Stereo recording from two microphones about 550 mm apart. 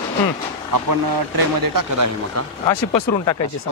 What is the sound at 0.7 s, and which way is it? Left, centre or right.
Speech, right.